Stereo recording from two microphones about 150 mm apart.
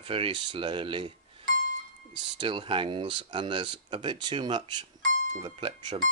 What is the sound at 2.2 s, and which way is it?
Speech, 35° right (ahead or behind).